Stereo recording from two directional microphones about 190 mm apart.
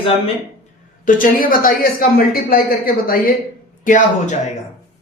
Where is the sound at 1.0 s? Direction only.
45° left (ahead or behind).